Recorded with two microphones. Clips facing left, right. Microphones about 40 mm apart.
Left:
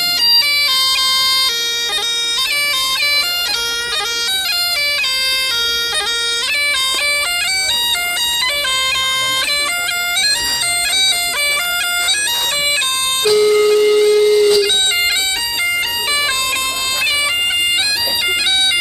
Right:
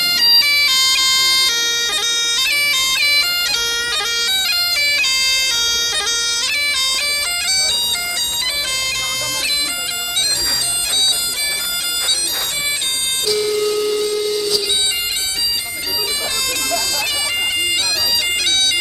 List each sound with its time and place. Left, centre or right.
13.2 s music: left